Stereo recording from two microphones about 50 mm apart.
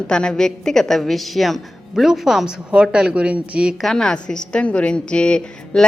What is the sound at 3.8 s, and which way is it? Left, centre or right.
A woman's voice, centre.